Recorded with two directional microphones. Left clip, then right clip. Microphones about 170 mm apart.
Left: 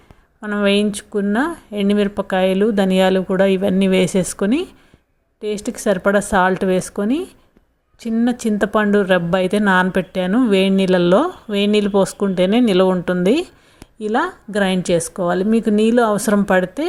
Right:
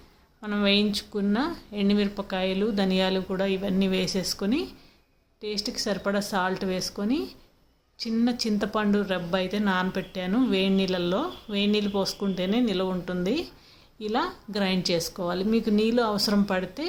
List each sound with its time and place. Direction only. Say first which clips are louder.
0.4 s speech: left 7 dB; 25° left (ahead or behind)
5.8 s speech: left 13 dB; 35° left (ahead or behind)
12.9 s speech: left 12 dB; 25° left (ahead or behind)